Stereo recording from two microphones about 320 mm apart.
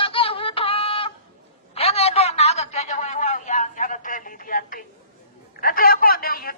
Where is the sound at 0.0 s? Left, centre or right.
Centre.